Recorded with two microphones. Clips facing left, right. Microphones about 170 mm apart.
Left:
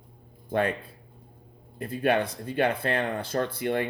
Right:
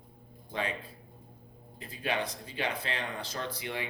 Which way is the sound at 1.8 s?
55° left (ahead or behind).